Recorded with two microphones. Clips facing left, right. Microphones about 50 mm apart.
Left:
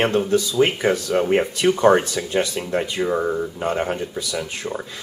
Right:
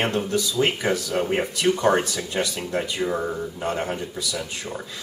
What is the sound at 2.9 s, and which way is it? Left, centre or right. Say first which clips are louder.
Speech: left 4 dB; centre.